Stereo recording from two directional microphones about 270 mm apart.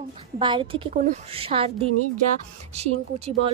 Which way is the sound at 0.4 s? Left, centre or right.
Centre.